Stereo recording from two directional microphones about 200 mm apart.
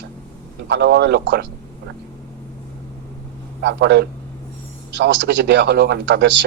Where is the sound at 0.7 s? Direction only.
60° right (ahead or behind).